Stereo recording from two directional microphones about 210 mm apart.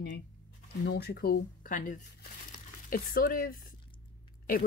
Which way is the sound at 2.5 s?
45° left (ahead or behind).